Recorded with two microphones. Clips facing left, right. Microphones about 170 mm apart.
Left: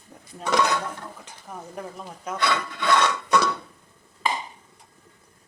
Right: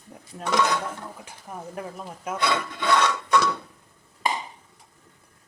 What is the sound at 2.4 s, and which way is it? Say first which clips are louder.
Filing: even; 20° right (ahead or behind).